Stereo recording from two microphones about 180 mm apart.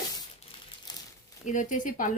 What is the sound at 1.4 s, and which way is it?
Speech, 45° left (ahead or behind).